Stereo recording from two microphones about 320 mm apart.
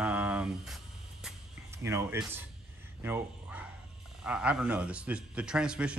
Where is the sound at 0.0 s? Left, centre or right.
Centre.